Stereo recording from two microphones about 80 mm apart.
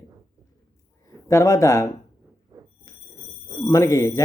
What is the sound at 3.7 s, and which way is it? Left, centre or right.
Speech, left.